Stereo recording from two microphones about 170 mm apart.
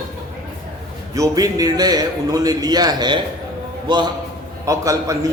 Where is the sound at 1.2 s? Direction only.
20° right (ahead or behind).